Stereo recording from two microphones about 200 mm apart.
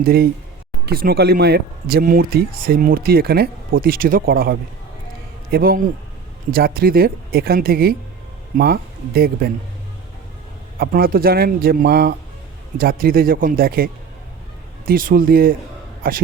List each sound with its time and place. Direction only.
0.0 s speech: 50° right (ahead or behind)
10.8 s speech: 45° right (ahead or behind)